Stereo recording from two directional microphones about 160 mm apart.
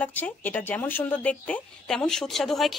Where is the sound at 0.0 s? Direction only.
10° left (ahead or behind).